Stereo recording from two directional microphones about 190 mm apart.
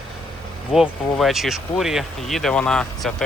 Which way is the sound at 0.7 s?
Centre (ahead or behind).